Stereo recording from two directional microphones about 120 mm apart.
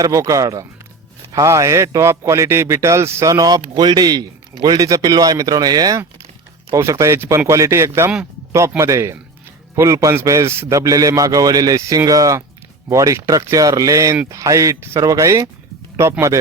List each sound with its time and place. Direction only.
0.0 s a man's voice: 30° right (ahead or behind)